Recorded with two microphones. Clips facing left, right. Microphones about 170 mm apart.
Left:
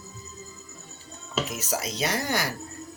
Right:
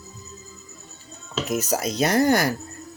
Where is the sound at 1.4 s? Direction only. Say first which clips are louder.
Right 7 dB; 45° right (ahead or behind).